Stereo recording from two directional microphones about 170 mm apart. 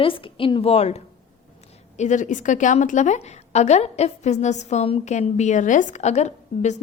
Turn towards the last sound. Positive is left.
turn(degrees=40)  # may be behind; listen again after turning